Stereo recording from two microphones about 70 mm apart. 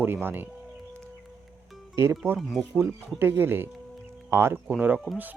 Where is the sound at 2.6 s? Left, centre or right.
Right.